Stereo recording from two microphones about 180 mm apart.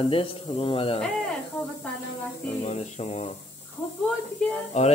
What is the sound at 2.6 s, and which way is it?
Speech, 40° left (ahead or behind).